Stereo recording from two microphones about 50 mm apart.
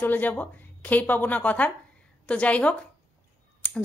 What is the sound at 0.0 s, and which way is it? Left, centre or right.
A woman's voice, left.